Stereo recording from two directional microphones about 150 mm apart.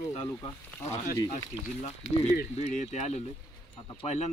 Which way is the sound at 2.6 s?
50° left (ahead or behind).